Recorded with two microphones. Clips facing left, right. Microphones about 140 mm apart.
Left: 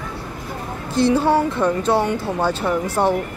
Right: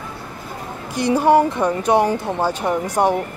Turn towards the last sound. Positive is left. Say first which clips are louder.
# right 1 dB
turn(degrees=-15)  # may be behind; listen again after turning